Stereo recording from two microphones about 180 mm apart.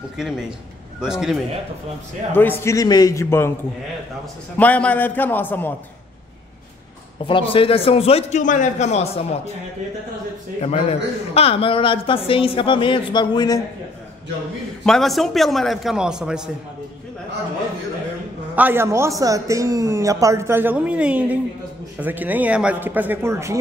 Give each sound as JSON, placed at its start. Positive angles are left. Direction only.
{"t": 1.0, "sound": "a man's voice", "side_deg": -5}
{"t": 2.3, "sound": "a man's voice", "side_deg": 10}
{"t": 4.6, "sound": "a man's voice", "side_deg": 10}
{"t": 7.2, "sound": "a man's voice", "side_deg": 30}
{"t": 10.6, "sound": "a man's voice", "side_deg": 35}
{"t": 14.9, "sound": "a man's voice", "side_deg": 0}
{"t": 18.5, "sound": "a man's voice", "side_deg": -10}